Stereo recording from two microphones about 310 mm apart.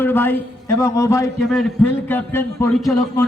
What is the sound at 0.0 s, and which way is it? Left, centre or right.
A man's voice, centre.